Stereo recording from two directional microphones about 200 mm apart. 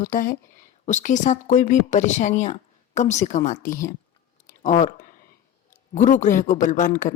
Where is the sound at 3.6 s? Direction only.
15° left (ahead or behind).